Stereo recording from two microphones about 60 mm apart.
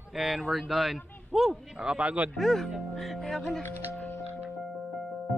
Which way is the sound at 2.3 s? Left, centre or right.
Centre.